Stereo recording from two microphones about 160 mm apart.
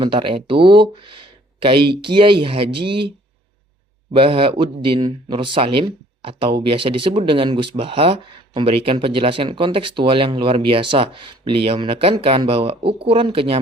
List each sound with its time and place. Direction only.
0.0 s speech: 30° right (ahead or behind)
4.1 s speech: 35° right (ahead or behind)